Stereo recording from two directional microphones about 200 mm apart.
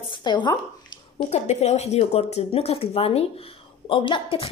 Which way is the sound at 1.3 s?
35° left (ahead or behind).